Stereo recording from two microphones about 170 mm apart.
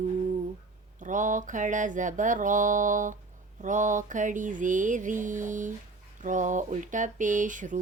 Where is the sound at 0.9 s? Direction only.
50° right (ahead or behind).